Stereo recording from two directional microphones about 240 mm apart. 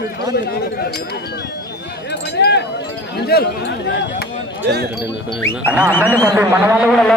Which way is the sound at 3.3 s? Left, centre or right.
Left.